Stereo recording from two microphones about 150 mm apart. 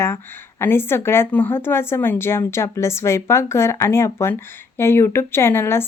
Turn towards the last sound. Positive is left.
turn(degrees=15)  # may be behind; listen again after turning